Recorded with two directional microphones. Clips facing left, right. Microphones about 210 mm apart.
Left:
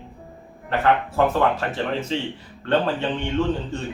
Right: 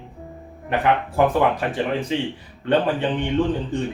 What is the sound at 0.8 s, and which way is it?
Speech, 15° right (ahead or behind).